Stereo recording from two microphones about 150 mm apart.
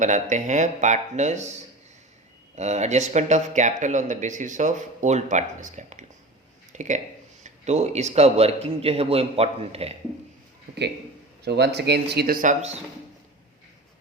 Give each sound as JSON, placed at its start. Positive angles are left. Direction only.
{"t": 0.0, "sound": "speech", "side_deg": -55}
{"t": 2.6, "sound": "speech", "side_deg": -50}
{"t": 11.4, "sound": "speech", "side_deg": -90}